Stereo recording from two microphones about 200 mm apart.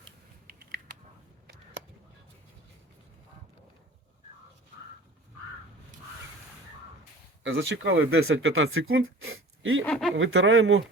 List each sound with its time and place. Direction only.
0.4 s a sound: 45° right (ahead or behind)
7.4 s speech: 65° right (ahead or behind); by 9.8 s 85° right
9.8 s speech: centre (ahead or behind)
10.2 s speech: 75° right (ahead or behind)